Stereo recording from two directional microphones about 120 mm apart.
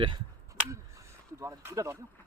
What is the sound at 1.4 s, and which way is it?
Speech, 25° right (ahead or behind).